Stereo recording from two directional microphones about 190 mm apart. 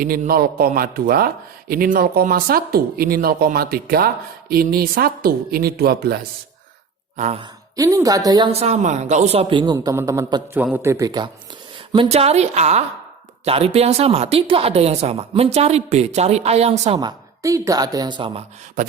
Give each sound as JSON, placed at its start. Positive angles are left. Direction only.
{"t": 0.0, "sound": "speech", "side_deg": -50}
{"t": 7.2, "sound": "speech", "side_deg": -35}
{"t": 7.8, "sound": "a man's voice", "side_deg": -15}
{"t": 8.5, "sound": "a man's voice", "side_deg": -35}
{"t": 17.0, "sound": "a man's voice", "side_deg": -20}